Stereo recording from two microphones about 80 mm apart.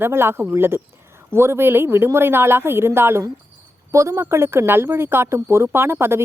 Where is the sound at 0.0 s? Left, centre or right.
Right.